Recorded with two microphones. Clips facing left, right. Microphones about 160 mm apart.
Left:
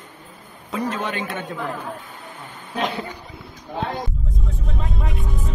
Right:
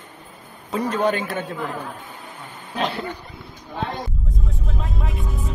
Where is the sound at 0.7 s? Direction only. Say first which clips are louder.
Right 4 dB; 35° right (ahead or behind).